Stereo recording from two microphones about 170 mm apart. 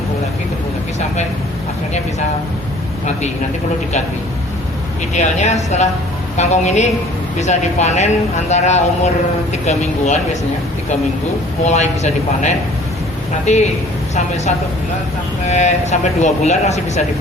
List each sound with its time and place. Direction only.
5.1 s speech: 45° left (ahead or behind)
11.6 s speech: 40° left (ahead or behind)
15.4 s speech: 45° left (ahead or behind)